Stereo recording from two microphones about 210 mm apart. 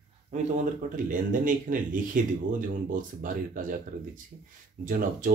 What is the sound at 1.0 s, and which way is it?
Speech, 40° right (ahead or behind).